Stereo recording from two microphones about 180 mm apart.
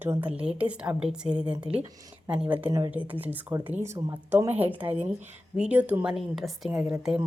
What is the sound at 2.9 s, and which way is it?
A woman's voice, 10° right (ahead or behind).